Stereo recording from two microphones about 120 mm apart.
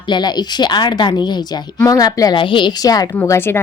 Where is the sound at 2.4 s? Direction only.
45° left (ahead or behind); by 3.5 s 20° left (ahead or behind).